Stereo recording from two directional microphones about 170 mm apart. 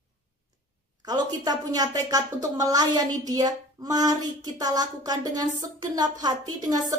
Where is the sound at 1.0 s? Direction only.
25° right (ahead or behind).